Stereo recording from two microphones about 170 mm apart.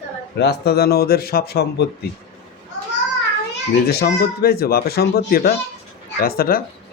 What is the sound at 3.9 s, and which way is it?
A man's voice, 65° left (ahead or behind).